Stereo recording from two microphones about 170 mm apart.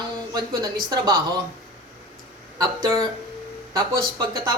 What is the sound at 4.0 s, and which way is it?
Speech, 25° right (ahead or behind).